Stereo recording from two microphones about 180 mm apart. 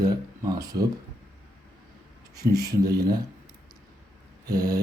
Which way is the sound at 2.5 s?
20° right (ahead or behind).